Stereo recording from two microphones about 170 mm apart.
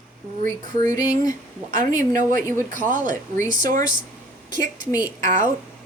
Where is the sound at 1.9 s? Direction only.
50° right (ahead or behind).